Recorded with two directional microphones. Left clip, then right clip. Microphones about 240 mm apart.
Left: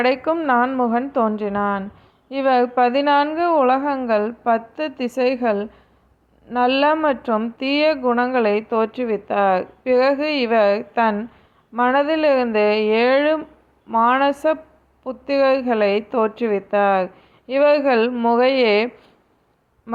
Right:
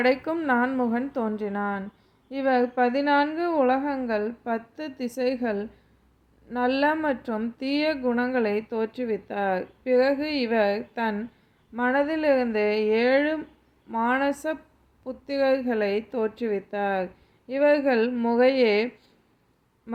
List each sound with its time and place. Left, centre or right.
0.0 s a woman's voice: centre